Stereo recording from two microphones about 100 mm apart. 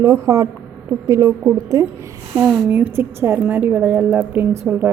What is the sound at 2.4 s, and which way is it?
A woman's voice, 15° right (ahead or behind).